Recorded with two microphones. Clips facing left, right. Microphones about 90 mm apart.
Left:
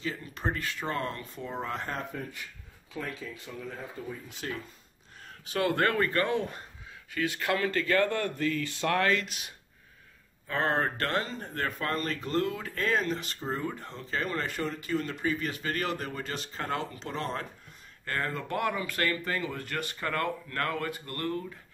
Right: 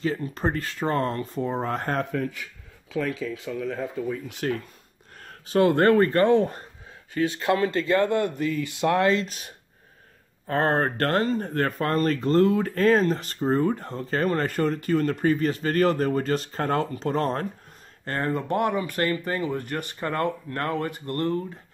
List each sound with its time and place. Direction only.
0.0 s speech: 40° right (ahead or behind)
2.9 s speech: 90° right; by 4.6 s 65° right (ahead or behind)
5.5 s speech: 35° right (ahead or behind)
7.2 s speech: 25° right (ahead or behind); by 17.5 s 45° right (ahead or behind)
18.0 s speech: 30° right (ahead or behind)